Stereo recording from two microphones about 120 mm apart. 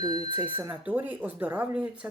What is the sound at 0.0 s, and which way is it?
Speech, 35° right (ahead or behind).